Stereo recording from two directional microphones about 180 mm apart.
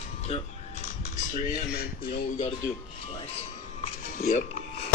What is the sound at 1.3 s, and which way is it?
Speech, 60° left (ahead or behind).